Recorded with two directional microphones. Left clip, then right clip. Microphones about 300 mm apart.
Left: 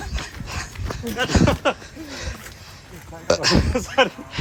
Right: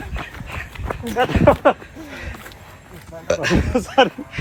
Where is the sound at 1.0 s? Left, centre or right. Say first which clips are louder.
Right 6 dB; centre.